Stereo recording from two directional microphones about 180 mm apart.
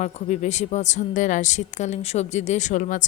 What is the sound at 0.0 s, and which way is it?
A woman's voice, 40° left (ahead or behind).